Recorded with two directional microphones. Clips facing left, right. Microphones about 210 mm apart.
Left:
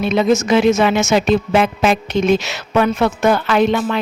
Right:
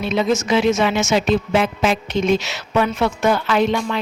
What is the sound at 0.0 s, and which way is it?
Speech, 55° left (ahead or behind).